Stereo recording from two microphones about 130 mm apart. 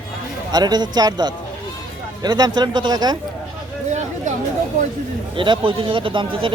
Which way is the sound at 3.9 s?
65° right (ahead or behind).